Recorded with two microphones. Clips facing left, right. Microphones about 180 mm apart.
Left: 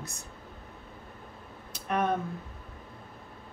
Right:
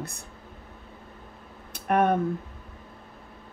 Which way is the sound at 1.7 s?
55° right (ahead or behind).